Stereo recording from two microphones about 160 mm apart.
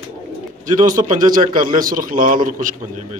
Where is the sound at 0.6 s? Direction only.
55° right (ahead or behind).